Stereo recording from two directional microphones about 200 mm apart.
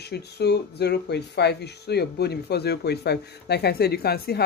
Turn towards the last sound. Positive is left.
turn(degrees=50)  # may be behind; listen again after turning